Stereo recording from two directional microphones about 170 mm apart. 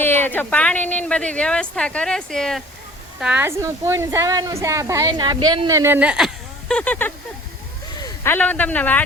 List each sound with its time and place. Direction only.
0.0 s speech: 10° left (ahead or behind)
3.2 s a woman's voice: 10° right (ahead or behind); by 9.0 s 10° left (ahead or behind)